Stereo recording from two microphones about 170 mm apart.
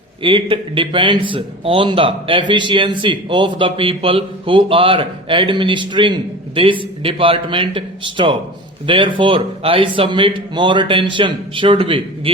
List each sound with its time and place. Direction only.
0.2 s a man's voice: 30° right (ahead or behind)